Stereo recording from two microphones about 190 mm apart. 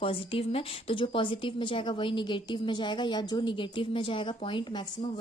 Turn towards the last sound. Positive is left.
turn(degrees=25)  # may be behind; listen again after turning